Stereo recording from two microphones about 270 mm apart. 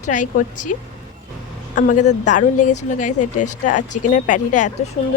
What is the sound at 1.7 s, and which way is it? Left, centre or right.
Speech, left.